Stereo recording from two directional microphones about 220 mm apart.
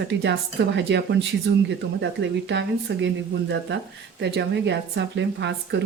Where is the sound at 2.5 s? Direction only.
50° right (ahead or behind).